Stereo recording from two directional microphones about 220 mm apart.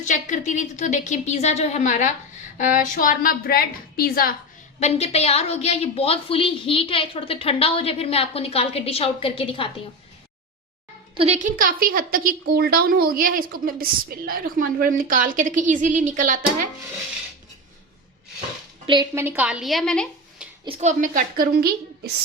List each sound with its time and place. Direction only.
0.0 s speech: 35° left (ahead or behind)
4.8 s a woman's voice: 30° left (ahead or behind)
11.1 s a woman's voice: 25° right (ahead or behind)
18.9 s speech: 15° right (ahead or behind); by 20.5 s 5° left (ahead or behind)
20.7 s a woman's voice: 35° right (ahead or behind)